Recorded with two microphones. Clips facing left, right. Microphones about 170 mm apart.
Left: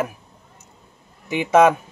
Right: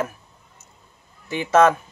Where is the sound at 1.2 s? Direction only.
15° left (ahead or behind).